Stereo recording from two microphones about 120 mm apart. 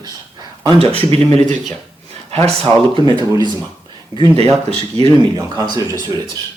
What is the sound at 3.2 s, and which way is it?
Speech, 40° right (ahead or behind).